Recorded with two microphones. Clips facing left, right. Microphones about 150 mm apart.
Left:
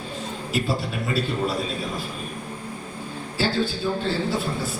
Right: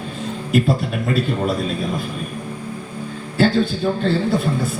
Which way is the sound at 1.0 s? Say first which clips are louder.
Right 5 dB; 55° right (ahead or behind).